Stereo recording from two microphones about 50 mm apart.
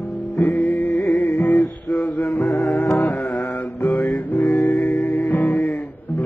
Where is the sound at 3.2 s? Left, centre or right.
Centre.